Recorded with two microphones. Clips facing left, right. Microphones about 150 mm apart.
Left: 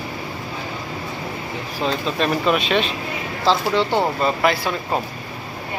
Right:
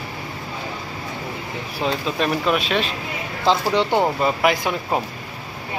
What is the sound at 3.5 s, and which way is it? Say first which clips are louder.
Speech: even; 15° right (ahead or behind).